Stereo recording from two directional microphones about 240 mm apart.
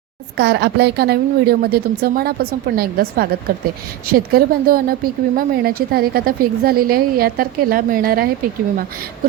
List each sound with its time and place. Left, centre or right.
0.3 s a woman's voice: right